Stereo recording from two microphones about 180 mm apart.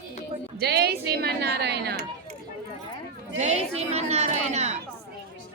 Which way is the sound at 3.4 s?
35° right (ahead or behind).